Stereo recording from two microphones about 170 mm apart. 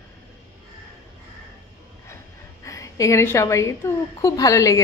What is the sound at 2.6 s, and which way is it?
A woman's voice, 20° left (ahead or behind).